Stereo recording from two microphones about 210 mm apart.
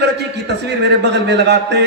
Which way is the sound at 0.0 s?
55° right (ahead or behind).